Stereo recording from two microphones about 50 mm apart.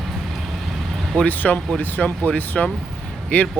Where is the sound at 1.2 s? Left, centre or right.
Left.